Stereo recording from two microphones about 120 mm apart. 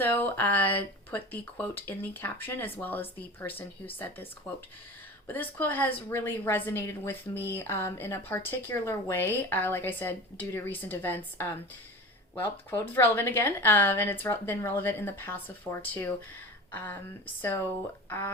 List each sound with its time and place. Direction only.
0.0 s speech: 15° left (ahead or behind)
5.3 s speech: 15° left (ahead or behind)
12.7 s speech: 15° left (ahead or behind)